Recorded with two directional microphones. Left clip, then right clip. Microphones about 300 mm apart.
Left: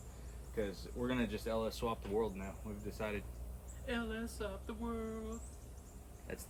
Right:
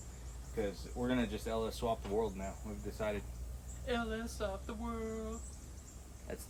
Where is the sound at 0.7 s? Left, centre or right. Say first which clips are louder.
Right 2 dB; centre.